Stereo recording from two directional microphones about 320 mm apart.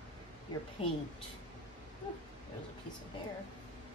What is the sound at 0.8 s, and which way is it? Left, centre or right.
Speech, centre.